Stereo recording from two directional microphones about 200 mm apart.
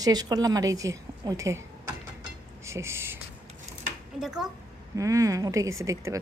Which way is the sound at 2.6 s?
15° right (ahead or behind).